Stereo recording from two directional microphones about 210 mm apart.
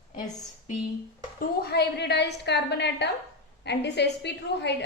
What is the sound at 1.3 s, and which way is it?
A woman's voice, 50° left (ahead or behind).